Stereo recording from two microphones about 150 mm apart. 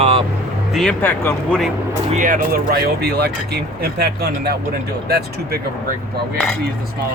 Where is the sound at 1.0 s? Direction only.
15° left (ahead or behind).